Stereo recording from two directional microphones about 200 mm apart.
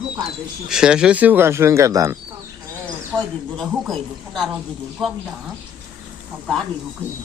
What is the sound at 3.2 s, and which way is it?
Speech, centre (ahead or behind).